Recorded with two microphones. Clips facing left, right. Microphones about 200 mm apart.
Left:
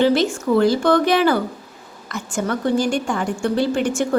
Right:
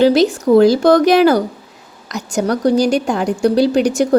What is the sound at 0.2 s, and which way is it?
Speech, 40° right (ahead or behind).